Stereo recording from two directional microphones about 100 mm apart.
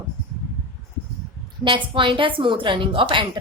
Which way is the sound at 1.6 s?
55° right (ahead or behind).